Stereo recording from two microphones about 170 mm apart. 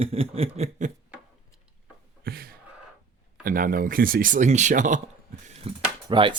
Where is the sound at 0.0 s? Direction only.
35° right (ahead or behind).